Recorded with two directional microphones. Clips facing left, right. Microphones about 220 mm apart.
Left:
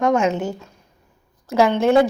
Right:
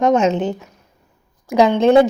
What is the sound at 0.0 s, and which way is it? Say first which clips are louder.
A woman's voice: right 3 dB; 20° right (ahead or behind).